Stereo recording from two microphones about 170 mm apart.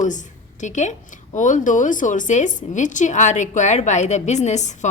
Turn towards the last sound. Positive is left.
turn(degrees=45)  # may be behind; listen again after turning